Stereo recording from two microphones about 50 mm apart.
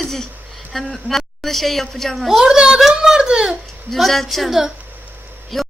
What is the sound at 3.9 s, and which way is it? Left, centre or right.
Speech, centre.